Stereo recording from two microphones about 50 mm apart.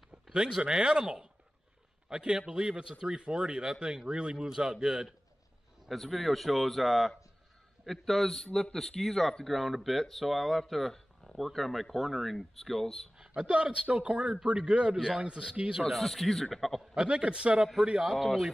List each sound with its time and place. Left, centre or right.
0.1 s a sound: centre
0.6 s a man's voice: centre
5.9 s speech: centre
13.4 s a man's voice: right
15.9 s speech: centre
16.9 s a man's voice: centre
18.1 s speech: centre